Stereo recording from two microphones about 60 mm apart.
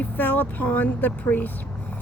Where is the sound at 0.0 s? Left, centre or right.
Left.